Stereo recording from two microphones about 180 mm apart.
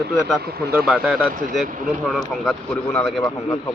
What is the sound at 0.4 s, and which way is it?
Speech, 60° right (ahead or behind).